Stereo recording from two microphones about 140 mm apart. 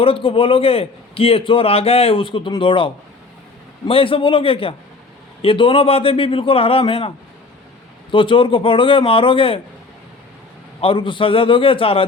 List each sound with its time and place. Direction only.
0.0 s a man's voice: 40° left (ahead or behind)
8.1 s a man's voice: 35° left (ahead or behind)
10.8 s a man's voice: 40° left (ahead or behind)